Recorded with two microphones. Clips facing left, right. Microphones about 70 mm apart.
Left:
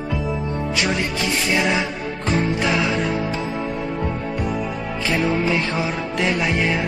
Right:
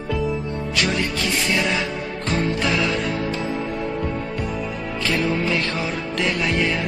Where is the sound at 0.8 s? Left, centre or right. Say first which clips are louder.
Right 1 dB; centre.